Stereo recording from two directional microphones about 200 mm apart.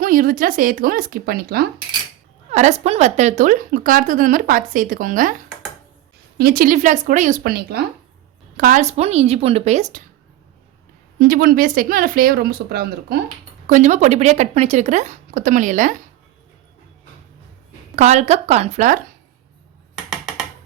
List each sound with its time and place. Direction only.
0.0 s speech: 45° right (ahead or behind)
2.5 s a woman's voice: 35° right (ahead or behind)
6.3 s a woman's voice: 50° right (ahead or behind)
11.2 s speech: 45° right (ahead or behind)
13.7 s a woman's voice: 40° right (ahead or behind)
17.9 s a woman's voice: 35° right (ahead or behind)
20.1 s a sound: centre (ahead or behind)